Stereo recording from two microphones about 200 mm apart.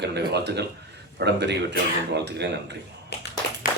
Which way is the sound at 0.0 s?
55° right (ahead or behind).